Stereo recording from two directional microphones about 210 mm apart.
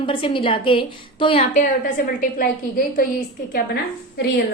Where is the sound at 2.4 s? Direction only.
40° left (ahead or behind).